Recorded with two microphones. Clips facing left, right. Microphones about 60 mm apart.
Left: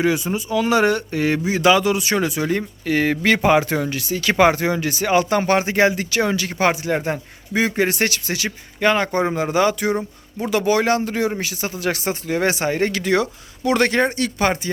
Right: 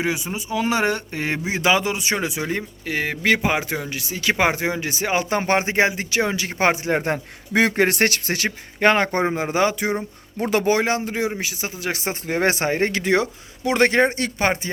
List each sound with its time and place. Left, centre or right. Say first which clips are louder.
0.3 s speech: left 1 dB; right
7.5 s speech: right 1 dB; right
9.2 s speech: left 2 dB; right
10.3 s speech: left 1 dB; right
10.8 s speech: left 3 dB; centre
12.3 s speech: even; right